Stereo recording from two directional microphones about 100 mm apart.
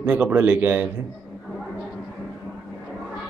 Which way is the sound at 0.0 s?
20° right (ahead or behind).